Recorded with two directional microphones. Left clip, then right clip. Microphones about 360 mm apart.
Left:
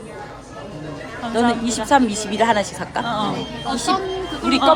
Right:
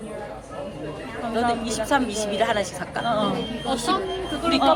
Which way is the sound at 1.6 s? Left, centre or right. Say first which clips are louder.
Left 6 dB; left.